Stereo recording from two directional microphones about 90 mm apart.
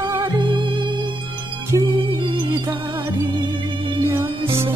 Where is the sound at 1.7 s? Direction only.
45° right (ahead or behind).